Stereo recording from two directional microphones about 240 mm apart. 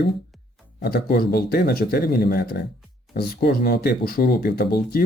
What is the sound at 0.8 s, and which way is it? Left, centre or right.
Speech, left.